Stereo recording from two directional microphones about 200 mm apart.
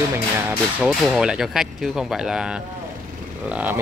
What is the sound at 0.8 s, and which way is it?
Speech, centre (ahead or behind).